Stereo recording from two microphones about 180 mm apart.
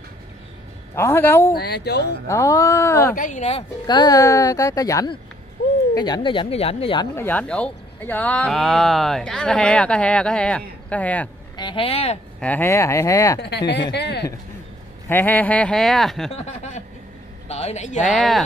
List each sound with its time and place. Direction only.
0.9 s speech: 15° left (ahead or behind)
1.5 s speech: 65° left (ahead or behind)
2.2 s speech: 15° left (ahead or behind)
3.2 s speech: 45° left (ahead or behind)
3.8 s speech: 20° left (ahead or behind)
7.2 s speech: 10° left (ahead or behind)
11.5 s speech: 25° left (ahead or behind)
12.4 s speech: 10° left (ahead or behind)
13.4 s speech: 70° left (ahead or behind)
15.0 s speech: 10° left (ahead or behind)
17.5 s speech: 35° left (ahead or behind)
18.0 s speech: centre (ahead or behind)